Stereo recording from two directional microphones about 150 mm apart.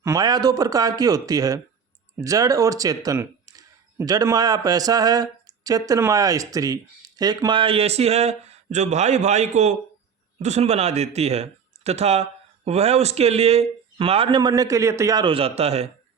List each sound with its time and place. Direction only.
0.0 s speech: 25° right (ahead or behind); by 15.9 s 45° right (ahead or behind)